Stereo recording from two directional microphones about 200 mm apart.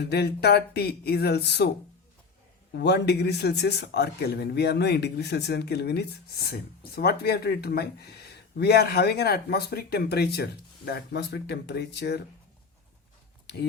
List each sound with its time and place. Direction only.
0.0 s speech: 55° left (ahead or behind)
2.7 s speech: 55° left (ahead or behind)
13.5 s speech: 60° left (ahead or behind)